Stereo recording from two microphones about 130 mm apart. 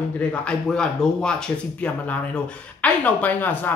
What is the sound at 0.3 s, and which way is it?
Speech, 5° left (ahead or behind).